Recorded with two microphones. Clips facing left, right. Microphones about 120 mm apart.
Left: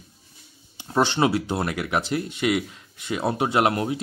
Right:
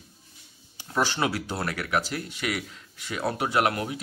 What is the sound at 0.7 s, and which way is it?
Speech, 25° left (ahead or behind).